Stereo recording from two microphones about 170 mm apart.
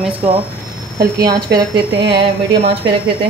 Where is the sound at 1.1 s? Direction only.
20° right (ahead or behind).